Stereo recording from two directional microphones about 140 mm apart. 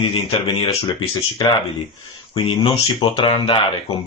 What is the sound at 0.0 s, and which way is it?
Speech, 40° left (ahead or behind).